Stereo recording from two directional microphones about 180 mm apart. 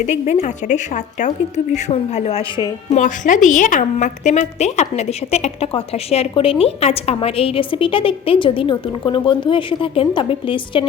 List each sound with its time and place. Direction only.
0.1 s a woman's voice: 40° left (ahead or behind)
2.9 s a woman's voice: 45° left (ahead or behind); by 10.8 s 30° left (ahead or behind)